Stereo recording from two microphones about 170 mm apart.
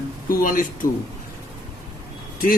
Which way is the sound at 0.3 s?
55° left (ahead or behind).